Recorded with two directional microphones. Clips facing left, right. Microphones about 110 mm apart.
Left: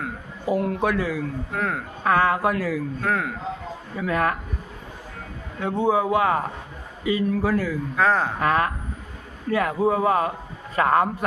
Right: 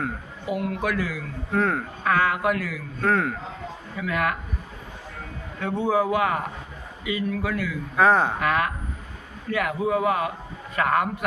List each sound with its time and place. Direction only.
0.4 s speech: 35° left (ahead or behind)
1.5 s speech: centre (ahead or behind)
2.0 s speech: 30° left (ahead or behind)
3.0 s speech: 5° left (ahead or behind)
3.9 s speech: 35° left (ahead or behind)
5.5 s speech: 20° left (ahead or behind)
7.9 s speech: 5° right (ahead or behind)
8.4 s speech: 35° left (ahead or behind)